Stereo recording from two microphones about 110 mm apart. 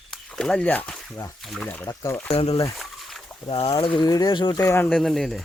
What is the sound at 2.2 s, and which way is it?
Speech, 65° left (ahead or behind).